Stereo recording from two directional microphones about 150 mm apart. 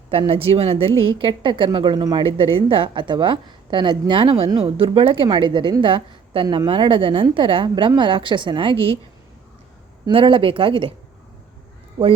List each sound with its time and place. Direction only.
0.1 s a woman's voice: 40° right (ahead or behind)
10.1 s a woman's voice: 35° right (ahead or behind)